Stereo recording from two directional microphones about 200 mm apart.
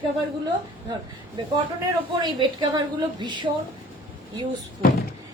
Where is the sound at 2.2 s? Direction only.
20° right (ahead or behind).